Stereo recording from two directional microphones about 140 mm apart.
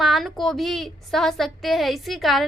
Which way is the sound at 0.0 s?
Centre (ahead or behind).